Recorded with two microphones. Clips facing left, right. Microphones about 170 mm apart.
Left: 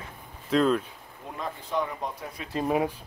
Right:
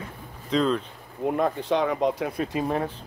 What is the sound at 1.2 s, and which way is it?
Speech, 60° right (ahead or behind).